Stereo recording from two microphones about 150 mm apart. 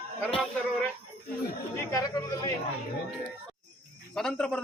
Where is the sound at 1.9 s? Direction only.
25° left (ahead or behind).